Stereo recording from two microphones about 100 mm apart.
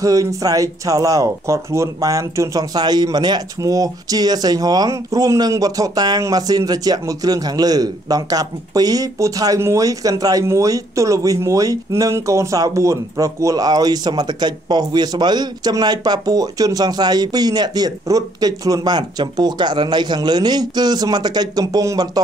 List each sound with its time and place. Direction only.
0.0 s speech: 35° right (ahead or behind)